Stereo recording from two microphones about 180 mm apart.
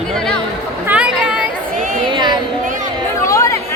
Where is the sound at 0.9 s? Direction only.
5° right (ahead or behind).